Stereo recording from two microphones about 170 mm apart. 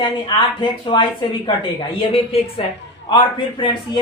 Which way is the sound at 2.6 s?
35° left (ahead or behind).